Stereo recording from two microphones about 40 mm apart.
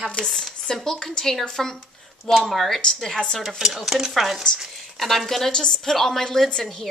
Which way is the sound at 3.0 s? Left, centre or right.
Centre.